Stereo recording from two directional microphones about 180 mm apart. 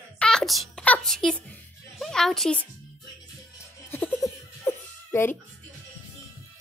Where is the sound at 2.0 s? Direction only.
Centre (ahead or behind).